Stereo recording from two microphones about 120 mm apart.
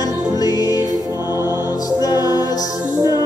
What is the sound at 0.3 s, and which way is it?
Music, 30° left (ahead or behind).